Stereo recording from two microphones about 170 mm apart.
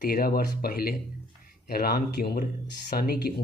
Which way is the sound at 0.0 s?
60° left (ahead or behind).